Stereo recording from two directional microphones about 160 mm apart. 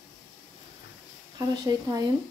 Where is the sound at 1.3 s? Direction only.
25° right (ahead or behind).